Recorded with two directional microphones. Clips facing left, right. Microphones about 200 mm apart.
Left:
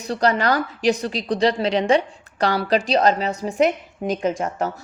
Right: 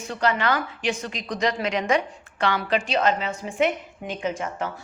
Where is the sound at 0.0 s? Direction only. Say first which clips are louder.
Left 4 dB; 40° left (ahead or behind).